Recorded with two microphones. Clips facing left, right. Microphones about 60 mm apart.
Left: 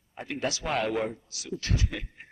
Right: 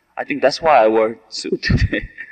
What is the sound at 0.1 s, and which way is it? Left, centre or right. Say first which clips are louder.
A man's voice: right 15 dB; right.